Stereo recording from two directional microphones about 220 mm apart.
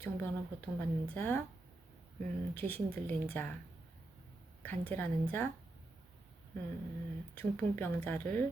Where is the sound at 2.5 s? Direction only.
10° left (ahead or behind).